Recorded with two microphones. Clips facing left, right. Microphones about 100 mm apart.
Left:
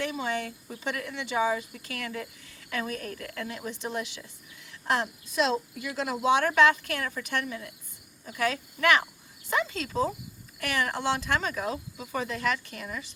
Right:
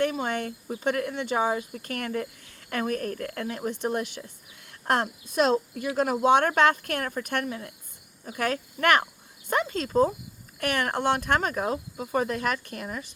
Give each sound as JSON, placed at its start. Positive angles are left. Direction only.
{"t": 0.0, "sound": "speech", "side_deg": -50}